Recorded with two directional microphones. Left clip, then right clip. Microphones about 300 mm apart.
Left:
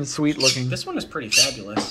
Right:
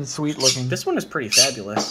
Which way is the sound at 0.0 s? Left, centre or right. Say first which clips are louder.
Left 3 dB; left.